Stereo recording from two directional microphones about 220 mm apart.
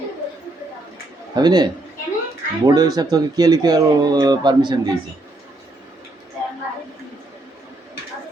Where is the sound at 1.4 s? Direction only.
20° right (ahead or behind).